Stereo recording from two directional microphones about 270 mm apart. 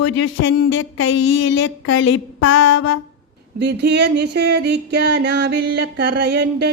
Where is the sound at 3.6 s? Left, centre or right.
Right.